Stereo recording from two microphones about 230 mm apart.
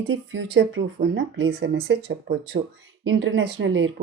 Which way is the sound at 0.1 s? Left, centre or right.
Right.